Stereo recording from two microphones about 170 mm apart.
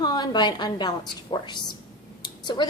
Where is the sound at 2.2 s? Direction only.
25° left (ahead or behind).